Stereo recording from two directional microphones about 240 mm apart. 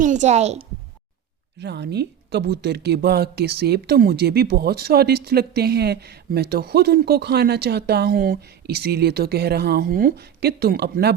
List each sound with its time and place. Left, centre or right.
0.0 s a woman's voice: right
1.5 s speech: right